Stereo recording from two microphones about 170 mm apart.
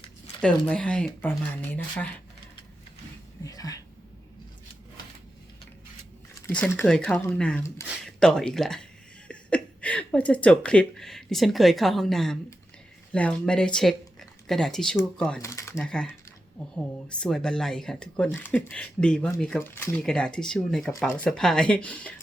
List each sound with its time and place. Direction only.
0.4 s speech: 5° left (ahead or behind)
3.4 s speech: 20° left (ahead or behind)
6.4 s speech: 10° left (ahead or behind)
15.4 s speech: 15° left (ahead or behind)
15.8 s speech: 5° left (ahead or behind)